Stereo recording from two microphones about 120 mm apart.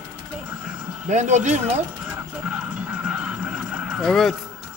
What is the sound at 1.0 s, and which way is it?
Speech, 90° right.